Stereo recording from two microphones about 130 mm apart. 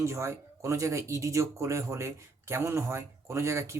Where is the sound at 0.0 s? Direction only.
20° right (ahead or behind).